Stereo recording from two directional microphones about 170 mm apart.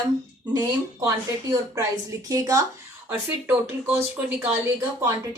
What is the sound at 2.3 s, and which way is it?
Speech, 20° right (ahead or behind).